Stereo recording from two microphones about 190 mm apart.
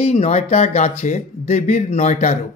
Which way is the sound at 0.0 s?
35° left (ahead or behind).